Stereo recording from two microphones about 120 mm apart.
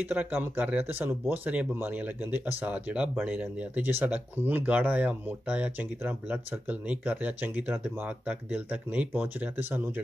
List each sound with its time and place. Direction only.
0.0 s speech: 15° right (ahead or behind)